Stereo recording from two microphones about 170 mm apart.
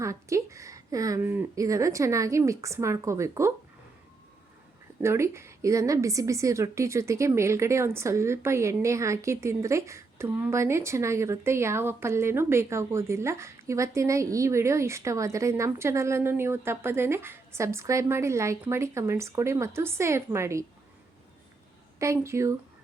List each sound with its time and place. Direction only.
0.0 s a woman's voice: 15° right (ahead or behind)
5.0 s a woman's voice: 15° right (ahead or behind)
21.9 s a woman's voice: 15° right (ahead or behind)